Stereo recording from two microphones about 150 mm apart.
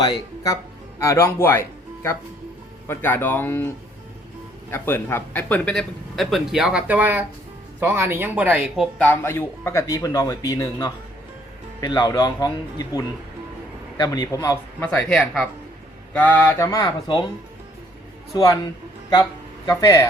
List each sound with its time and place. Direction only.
0.0 s speech: 25° left (ahead or behind)
4.7 s speech: 15° left (ahead or behind); by 8.6 s 10° right (ahead or behind)
9.0 s speech: 15° left (ahead or behind)
14.8 s speech: 10° left (ahead or behind); by 17.2 s 30° left (ahead or behind)
18.3 s speech: 25° left (ahead or behind)
19.8 s speech: 20° left (ahead or behind)